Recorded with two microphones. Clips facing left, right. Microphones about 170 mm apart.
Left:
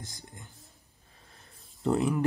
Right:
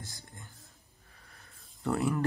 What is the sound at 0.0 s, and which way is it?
Whispering, 20° left (ahead or behind).